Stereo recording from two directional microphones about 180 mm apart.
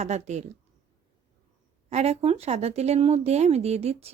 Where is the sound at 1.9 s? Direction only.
35° right (ahead or behind).